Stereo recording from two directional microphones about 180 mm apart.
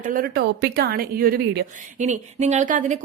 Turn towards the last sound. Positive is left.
turn(degrees=-45)  # may be behind; listen again after turning